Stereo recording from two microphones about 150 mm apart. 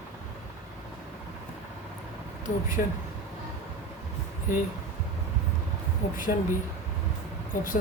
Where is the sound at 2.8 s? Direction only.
65° left (ahead or behind).